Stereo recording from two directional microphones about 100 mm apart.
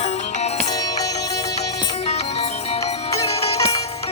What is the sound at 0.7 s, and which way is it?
Music, 40° left (ahead or behind).